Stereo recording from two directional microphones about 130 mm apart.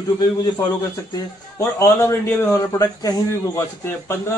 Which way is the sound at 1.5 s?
20° left (ahead or behind).